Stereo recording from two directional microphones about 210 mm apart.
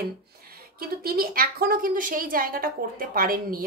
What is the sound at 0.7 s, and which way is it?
Speech, 45° right (ahead or behind).